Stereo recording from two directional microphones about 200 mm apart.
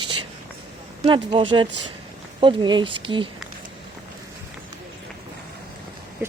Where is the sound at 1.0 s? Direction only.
25° right (ahead or behind).